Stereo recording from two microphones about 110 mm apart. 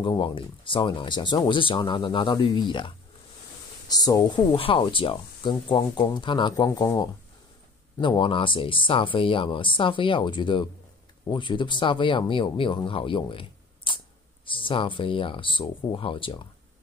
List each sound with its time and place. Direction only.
0.2 s speech: 50° left (ahead or behind)
3.9 s speech: 35° left (ahead or behind)
4.5 s speech: 55° left (ahead or behind); by 7.1 s 35° left (ahead or behind)
8.0 s speech: 45° left (ahead or behind)